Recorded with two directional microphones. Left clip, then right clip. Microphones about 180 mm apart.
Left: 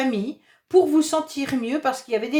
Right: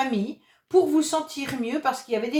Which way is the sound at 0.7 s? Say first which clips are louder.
Left 3 dB; 45° left (ahead or behind).